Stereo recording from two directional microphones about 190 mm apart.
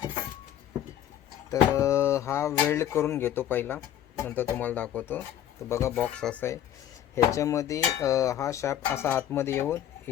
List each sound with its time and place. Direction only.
1.5 s speech: 15° left (ahead or behind)